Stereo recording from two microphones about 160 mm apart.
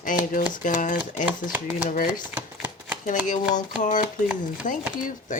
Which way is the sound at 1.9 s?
55° left (ahead or behind).